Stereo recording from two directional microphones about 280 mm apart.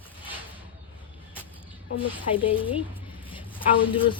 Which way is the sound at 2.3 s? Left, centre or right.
Centre.